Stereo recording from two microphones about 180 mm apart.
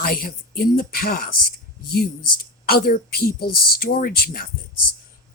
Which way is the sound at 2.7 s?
55° left (ahead or behind).